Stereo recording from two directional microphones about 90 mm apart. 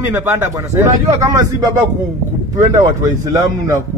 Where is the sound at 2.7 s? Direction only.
35° right (ahead or behind).